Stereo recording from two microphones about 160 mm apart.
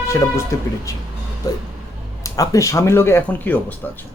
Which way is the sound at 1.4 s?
20° left (ahead or behind).